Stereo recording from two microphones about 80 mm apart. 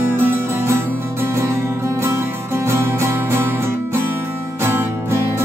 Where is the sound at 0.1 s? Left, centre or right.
Right.